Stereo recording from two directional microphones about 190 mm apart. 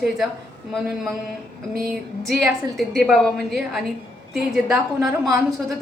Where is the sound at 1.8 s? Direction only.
Centre (ahead or behind).